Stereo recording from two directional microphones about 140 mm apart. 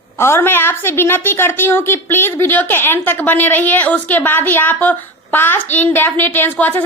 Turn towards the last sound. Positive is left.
turn(degrees=15)  # may be behind; listen again after turning